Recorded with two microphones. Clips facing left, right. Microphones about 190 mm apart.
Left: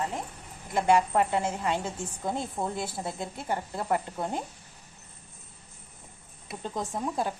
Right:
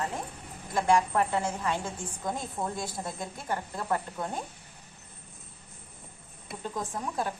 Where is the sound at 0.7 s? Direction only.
20° left (ahead or behind).